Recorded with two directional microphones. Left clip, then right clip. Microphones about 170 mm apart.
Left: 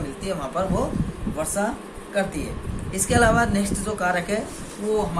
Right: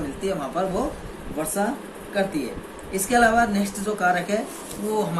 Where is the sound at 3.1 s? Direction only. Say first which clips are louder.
Right 1 dB; 55° left (ahead or behind).